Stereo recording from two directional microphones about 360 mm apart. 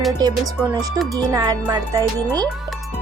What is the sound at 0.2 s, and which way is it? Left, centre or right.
Speech, centre.